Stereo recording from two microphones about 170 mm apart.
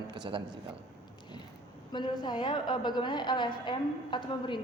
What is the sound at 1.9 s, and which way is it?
A woman's voice, 25° left (ahead or behind).